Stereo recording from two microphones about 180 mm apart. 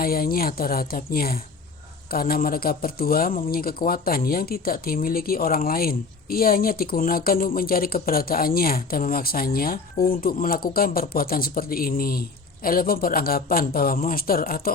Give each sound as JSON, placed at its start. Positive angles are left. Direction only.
{"t": 0.0, "sound": "a man's voice", "side_deg": 55}